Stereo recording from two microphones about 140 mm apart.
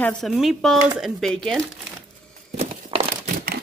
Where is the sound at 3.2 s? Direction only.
90° right.